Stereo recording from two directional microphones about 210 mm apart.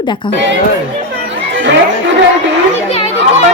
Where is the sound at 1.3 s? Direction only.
60° right (ahead or behind).